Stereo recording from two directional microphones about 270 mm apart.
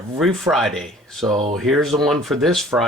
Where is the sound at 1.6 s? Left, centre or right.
Centre.